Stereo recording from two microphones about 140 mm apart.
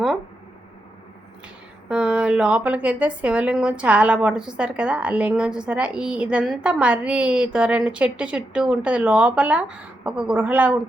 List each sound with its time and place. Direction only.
1.9 s a woman's voice: 5° right (ahead or behind)